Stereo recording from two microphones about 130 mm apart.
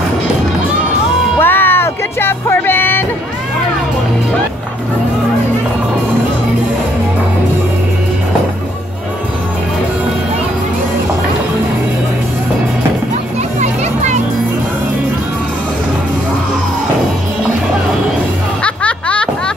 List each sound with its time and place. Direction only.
1.4 s music: 15° left (ahead or behind)
13.6 s children playing: 65° right (ahead or behind)
18.6 s a sound: 10° left (ahead or behind)